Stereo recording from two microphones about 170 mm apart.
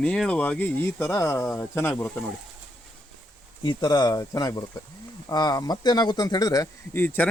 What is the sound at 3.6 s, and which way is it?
Speech, 25° left (ahead or behind).